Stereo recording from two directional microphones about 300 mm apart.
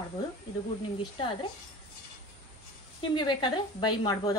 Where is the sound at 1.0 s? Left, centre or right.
Centre.